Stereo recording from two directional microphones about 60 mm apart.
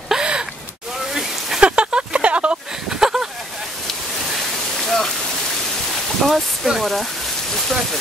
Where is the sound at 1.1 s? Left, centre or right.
Centre.